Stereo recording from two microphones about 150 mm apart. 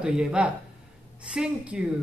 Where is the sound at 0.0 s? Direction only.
5° right (ahead or behind).